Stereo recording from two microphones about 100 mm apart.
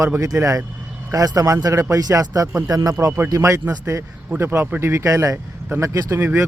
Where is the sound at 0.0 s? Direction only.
35° right (ahead or behind).